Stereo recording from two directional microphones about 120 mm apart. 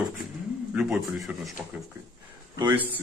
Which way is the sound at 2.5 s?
20° right (ahead or behind).